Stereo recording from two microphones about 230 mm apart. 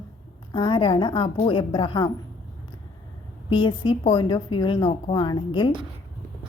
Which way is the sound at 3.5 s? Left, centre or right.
Left.